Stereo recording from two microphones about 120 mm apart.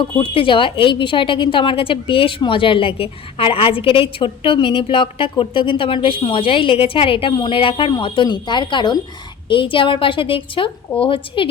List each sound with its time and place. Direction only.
0.2 s a woman's voice: 45° left (ahead or behind)